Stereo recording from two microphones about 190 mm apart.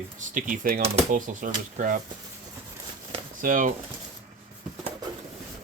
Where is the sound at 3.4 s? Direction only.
45° right (ahead or behind).